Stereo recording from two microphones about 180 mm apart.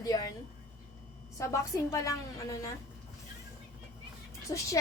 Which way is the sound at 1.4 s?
15° left (ahead or behind).